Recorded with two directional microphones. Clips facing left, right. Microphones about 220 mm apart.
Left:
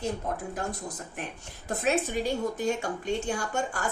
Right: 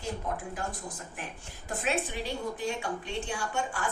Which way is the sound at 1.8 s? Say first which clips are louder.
Left 5 dB; 45° left (ahead or behind).